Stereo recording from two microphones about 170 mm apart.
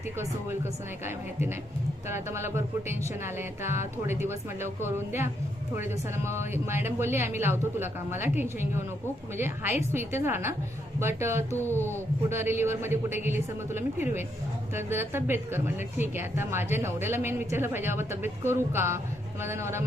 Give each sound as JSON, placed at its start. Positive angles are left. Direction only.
{"t": 0.6, "sound": "a woman's voice", "side_deg": -15}
{"t": 9.9, "sound": "a woman's voice", "side_deg": -15}
{"t": 11.5, "sound": "speech", "side_deg": 10}
{"t": 12.3, "sound": "a woman's voice", "side_deg": -15}